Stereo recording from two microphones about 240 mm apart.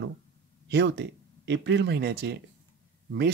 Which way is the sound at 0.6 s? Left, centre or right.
Right.